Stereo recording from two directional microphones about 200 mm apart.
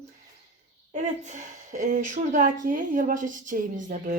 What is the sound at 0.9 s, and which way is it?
Speech, 35° right (ahead or behind).